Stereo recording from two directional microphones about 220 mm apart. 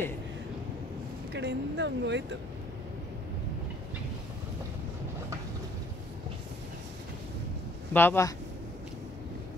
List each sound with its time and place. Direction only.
1.3 s speech: 50° right (ahead or behind)
7.9 s speech: 10° left (ahead or behind)